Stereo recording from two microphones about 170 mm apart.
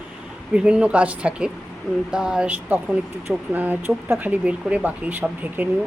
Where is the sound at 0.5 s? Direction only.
5° right (ahead or behind).